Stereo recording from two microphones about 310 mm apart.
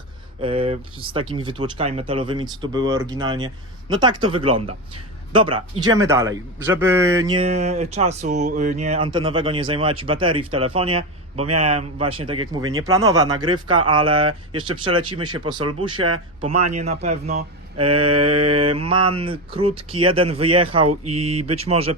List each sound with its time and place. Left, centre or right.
0.4 s speech: centre